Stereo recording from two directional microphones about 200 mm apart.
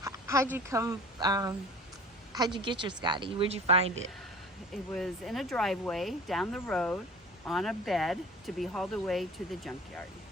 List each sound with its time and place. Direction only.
0.0 s a sound: 15° right (ahead or behind)
0.5 s speech: 15° right (ahead or behind); by 3.9 s 30° right (ahead or behind)
4.9 s speech: centre (ahead or behind)